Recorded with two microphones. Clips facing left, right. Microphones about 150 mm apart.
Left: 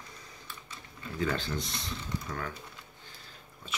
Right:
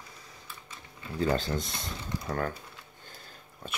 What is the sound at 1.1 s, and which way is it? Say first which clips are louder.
Speech: right 4 dB; 35° right (ahead or behind).